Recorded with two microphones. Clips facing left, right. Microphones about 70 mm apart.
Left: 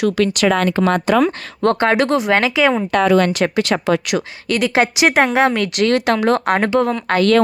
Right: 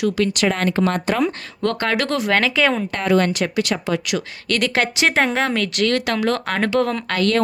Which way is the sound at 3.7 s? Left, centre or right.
Left.